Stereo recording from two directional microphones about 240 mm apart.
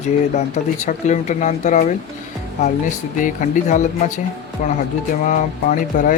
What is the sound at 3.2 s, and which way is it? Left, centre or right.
Speech, left.